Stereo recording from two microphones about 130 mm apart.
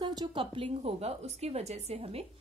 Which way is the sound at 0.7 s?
55° right (ahead or behind).